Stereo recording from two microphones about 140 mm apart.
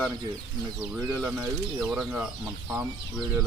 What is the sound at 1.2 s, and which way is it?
Speech, 15° right (ahead or behind).